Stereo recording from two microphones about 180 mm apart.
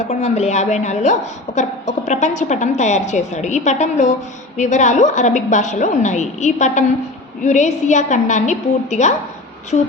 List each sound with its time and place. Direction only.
0.0 s a woman's voice: 35° left (ahead or behind)